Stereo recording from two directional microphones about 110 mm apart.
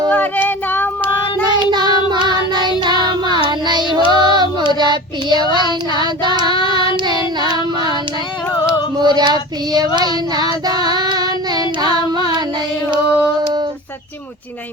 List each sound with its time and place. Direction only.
0.1 s child singing: 15° left (ahead or behind)
1.7 s child singing: 40° right (ahead or behind)
3.9 s female singing: 40° right (ahead or behind)
5.3 s child singing: 45° left (ahead or behind)
5.9 s child singing: 40° right (ahead or behind)
8.6 s child singing: 40° right (ahead or behind)